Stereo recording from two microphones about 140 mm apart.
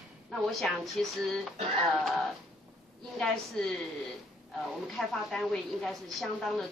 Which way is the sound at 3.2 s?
5° left (ahead or behind).